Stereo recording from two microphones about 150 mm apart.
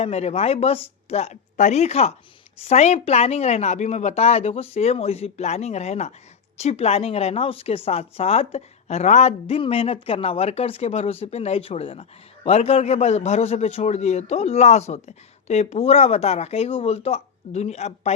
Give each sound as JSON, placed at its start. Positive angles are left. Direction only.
{"t": 0.0, "sound": "a woman's voice", "side_deg": 45}